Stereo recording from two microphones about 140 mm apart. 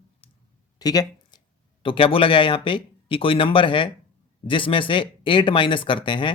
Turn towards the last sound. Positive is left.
turn(degrees=35)  # may be behind; listen again after turning